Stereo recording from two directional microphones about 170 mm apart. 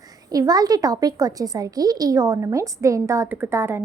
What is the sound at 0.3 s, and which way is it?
A woman's voice, 20° right (ahead or behind).